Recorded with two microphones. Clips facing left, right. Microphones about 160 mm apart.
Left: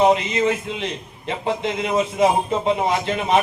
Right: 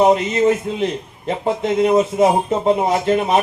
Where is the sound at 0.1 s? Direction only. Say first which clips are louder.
Right 4 dB; 40° right (ahead or behind).